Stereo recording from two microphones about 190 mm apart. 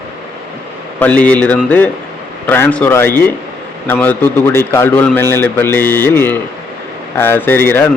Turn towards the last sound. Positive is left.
turn(degrees=10)  # may be behind; listen again after turning